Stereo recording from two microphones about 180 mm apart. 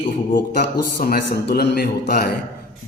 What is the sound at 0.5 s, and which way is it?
A man's voice, 65° left (ahead or behind).